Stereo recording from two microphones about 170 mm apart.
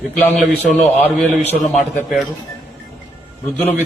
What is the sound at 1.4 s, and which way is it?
Speech, 40° left (ahead or behind).